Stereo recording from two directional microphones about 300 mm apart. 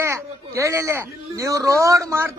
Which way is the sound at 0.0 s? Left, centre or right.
Centre.